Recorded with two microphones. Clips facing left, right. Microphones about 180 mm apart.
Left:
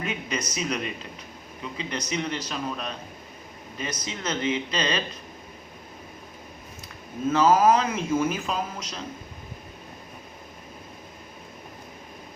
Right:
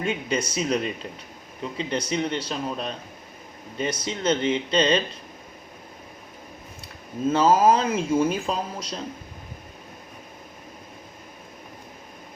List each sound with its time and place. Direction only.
0.0 s speech: 30° right (ahead or behind)
6.8 s speech: 30° right (ahead or behind)